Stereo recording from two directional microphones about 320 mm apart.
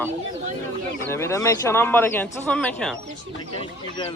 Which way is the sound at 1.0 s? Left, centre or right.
Centre.